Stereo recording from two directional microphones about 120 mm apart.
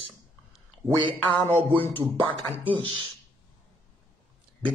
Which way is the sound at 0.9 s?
45° right (ahead or behind).